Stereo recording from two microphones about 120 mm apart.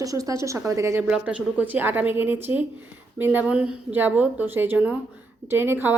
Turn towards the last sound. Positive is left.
turn(degrees=-20)  # may be behind; listen again after turning